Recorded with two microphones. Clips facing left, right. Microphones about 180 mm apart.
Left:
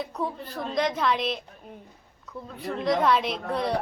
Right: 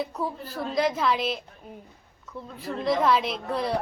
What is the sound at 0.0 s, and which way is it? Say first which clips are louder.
A woman's voice: right 1 dB; 5° right (ahead or behind).